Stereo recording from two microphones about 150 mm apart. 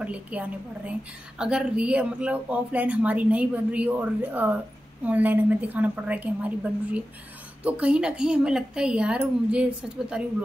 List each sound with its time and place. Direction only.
0.0 s speech: 10° right (ahead or behind)